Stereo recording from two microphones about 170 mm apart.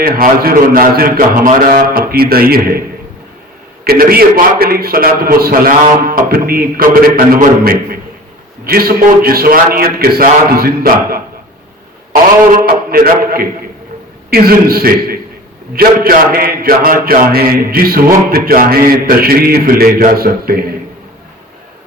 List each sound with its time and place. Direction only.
0.0 s a man's voice: 60° right (ahead or behind)
3.8 s a man's voice: 60° right (ahead or behind)